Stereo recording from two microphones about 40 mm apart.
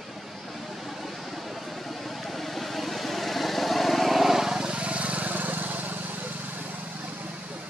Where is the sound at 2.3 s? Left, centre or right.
Centre.